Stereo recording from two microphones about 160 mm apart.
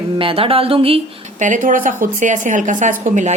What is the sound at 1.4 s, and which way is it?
A woman's voice, 55° right (ahead or behind).